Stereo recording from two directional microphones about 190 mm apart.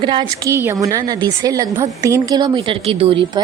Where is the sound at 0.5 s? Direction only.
15° right (ahead or behind).